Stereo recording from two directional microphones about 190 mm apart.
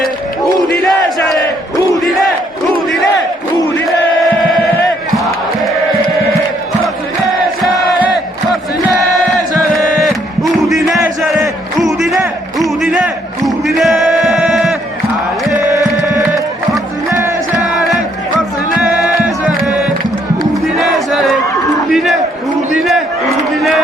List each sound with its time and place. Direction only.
0.8 s crowd: centre (ahead or behind)
10.4 s music: centre (ahead or behind)
12.5 s a sound: centre (ahead or behind)
13.4 s crowd: centre (ahead or behind)
15.7 s music: 20° left (ahead or behind)
17.1 s music: 15° right (ahead or behind)
18.8 s music: centre (ahead or behind)
20.7 s battle cry: centre (ahead or behind)
21.8 s crowd: centre (ahead or behind)